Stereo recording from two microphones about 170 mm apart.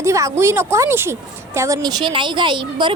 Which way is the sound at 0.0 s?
15° right (ahead or behind).